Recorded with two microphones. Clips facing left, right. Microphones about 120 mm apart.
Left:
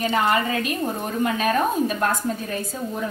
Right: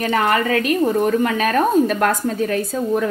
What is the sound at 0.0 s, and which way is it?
A woman's voice, 60° right (ahead or behind).